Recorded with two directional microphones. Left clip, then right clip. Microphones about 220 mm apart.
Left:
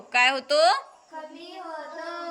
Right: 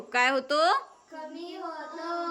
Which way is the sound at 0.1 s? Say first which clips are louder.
Left 4 dB; 15° right (ahead or behind).